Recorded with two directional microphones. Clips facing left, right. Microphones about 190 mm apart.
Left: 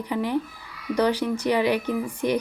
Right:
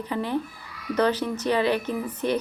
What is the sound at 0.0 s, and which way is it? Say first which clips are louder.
Speech: left 2 dB; 15° left (ahead or behind).